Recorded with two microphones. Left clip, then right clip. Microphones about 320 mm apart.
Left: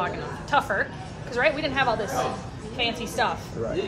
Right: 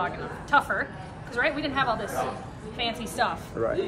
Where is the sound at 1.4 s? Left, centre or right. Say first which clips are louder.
Left 3 dB; centre.